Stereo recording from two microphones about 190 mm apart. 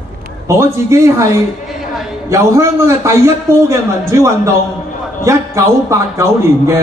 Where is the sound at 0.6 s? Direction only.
15° right (ahead or behind).